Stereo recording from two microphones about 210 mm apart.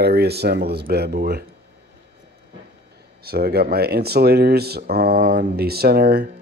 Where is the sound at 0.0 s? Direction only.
50° right (ahead or behind).